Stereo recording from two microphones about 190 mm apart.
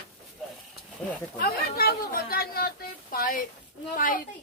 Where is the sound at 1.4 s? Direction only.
55° left (ahead or behind).